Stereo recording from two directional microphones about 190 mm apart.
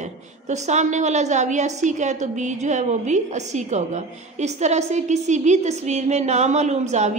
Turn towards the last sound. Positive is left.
turn(degrees=-35)  # may be behind; listen again after turning